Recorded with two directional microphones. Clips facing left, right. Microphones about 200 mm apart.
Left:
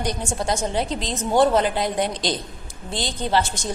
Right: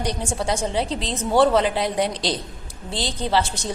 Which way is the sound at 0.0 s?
30° right (ahead or behind).